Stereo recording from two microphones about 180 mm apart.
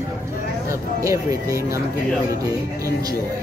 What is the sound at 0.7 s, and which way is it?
Speech, 15° right (ahead or behind).